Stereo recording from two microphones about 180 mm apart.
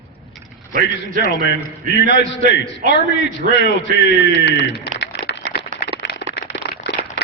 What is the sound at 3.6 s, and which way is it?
A man's voice, 80° left.